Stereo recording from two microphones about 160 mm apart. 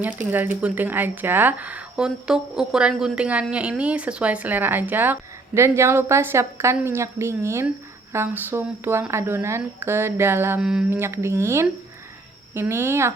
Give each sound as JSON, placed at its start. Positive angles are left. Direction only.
{"t": 0.3, "sound": "a woman's voice", "side_deg": -10}
{"t": 10.6, "sound": "a woman's voice", "side_deg": -5}